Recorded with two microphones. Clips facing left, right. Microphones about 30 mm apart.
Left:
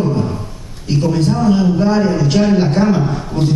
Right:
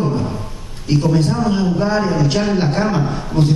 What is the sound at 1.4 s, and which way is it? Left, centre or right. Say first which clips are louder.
A man's voice: left 4 dB; centre.